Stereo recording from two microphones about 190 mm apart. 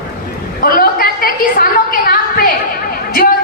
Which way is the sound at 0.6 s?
50° left (ahead or behind).